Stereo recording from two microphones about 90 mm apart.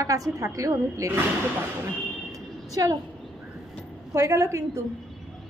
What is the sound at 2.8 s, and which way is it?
Speech, 45° right (ahead or behind).